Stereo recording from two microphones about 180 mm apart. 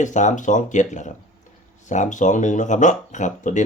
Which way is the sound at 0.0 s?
40° left (ahead or behind).